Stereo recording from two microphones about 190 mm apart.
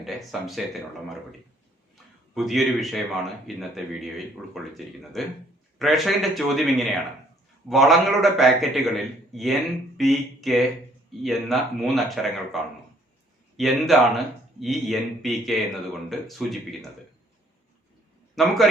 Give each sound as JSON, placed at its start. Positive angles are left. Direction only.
{"t": 0.0, "sound": "speech", "side_deg": 0}
{"t": 2.3, "sound": "speech", "side_deg": 0}
{"t": 18.3, "sound": "speech", "side_deg": 0}